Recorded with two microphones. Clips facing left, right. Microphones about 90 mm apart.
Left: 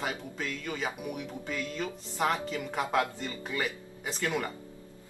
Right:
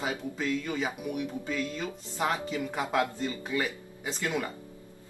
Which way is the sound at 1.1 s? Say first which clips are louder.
Right 4 dB; 5° right (ahead or behind).